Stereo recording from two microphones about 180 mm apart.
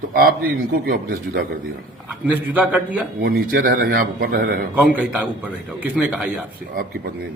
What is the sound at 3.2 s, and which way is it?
A man's voice, 55° right (ahead or behind).